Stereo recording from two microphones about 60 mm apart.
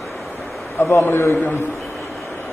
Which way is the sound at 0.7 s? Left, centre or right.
Left.